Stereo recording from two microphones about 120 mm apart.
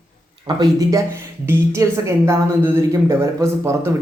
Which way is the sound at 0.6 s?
30° right (ahead or behind).